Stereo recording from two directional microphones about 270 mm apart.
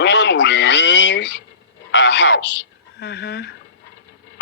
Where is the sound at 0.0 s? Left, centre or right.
Left.